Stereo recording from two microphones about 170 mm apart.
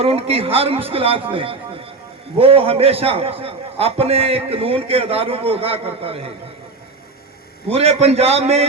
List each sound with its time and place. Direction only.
0.0 s a man's voice: 35° right (ahead or behind)
7.7 s a man's voice: 35° right (ahead or behind)